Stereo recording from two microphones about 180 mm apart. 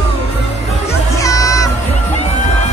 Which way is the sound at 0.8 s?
20° left (ahead or behind).